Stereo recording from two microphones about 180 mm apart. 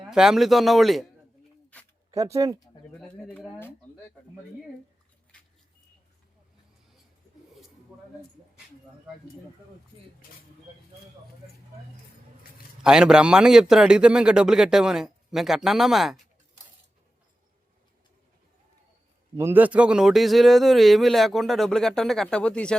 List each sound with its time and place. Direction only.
0.1 s speech: 5° right (ahead or behind)
2.0 s speech: 15° right (ahead or behind)
3.0 s speech: centre (ahead or behind)
7.9 s a sound: 5° right (ahead or behind)
12.8 s speech: 5° right (ahead or behind)
19.4 s speech: 10° right (ahead or behind); by 22.7 s 5° left (ahead or behind)